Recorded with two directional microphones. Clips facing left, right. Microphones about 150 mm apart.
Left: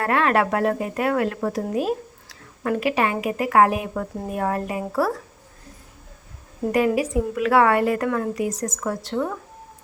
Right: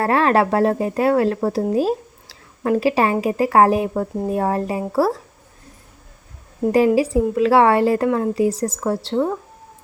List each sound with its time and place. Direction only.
0.0 s speech: 30° right (ahead or behind)
6.7 s speech: 30° right (ahead or behind)